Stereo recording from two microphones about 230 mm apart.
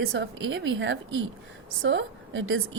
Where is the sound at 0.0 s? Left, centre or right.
Right.